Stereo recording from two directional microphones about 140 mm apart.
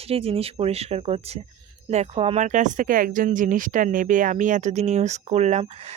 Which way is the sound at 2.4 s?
65° right (ahead or behind).